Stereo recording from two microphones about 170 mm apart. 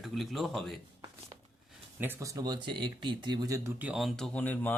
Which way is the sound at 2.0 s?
15° right (ahead or behind).